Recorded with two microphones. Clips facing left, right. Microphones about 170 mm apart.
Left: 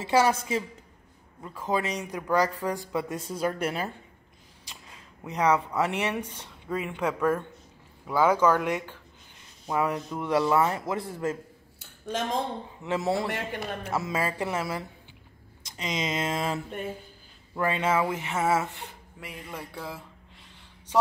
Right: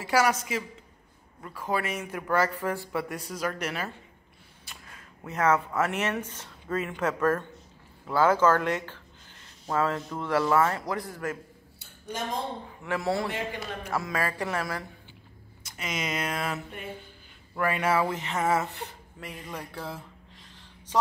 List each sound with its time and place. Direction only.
0.0 s speech: 25° left (ahead or behind)
1.4 s speech: 20° left (ahead or behind)
4.8 s a sound: 15° left (ahead or behind)
5.8 s speech: 15° left (ahead or behind)
12.8 s speech: 20° left (ahead or behind)
13.3 s speech: 60° left (ahead or behind)
13.8 s speech: 20° left (ahead or behind)
17.6 s speech: 25° left (ahead or behind)
19.7 s a sound: 10° left (ahead or behind)